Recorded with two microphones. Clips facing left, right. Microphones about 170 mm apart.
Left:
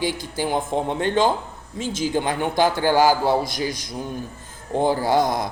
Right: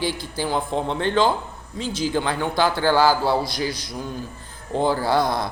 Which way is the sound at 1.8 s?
50° left (ahead or behind).